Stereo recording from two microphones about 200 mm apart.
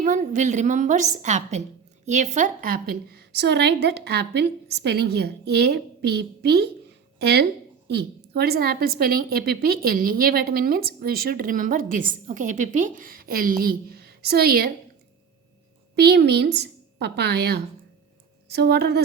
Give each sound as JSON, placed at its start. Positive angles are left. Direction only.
{"t": 0.0, "sound": "a woman's voice", "side_deg": -40}
{"t": 16.0, "sound": "a woman's voice", "side_deg": -55}